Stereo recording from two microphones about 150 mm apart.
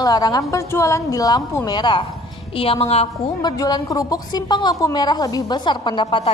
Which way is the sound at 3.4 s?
25° left (ahead or behind).